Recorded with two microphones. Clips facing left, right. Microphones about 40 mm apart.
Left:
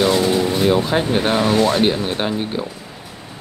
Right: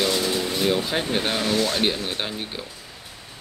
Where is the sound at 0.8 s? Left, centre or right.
Centre.